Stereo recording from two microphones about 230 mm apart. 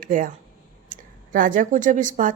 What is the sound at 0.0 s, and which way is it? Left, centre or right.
A woman's voice, right.